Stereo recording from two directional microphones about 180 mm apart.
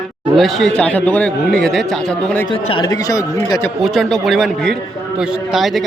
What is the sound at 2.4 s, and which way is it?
Speech, 30° left (ahead or behind).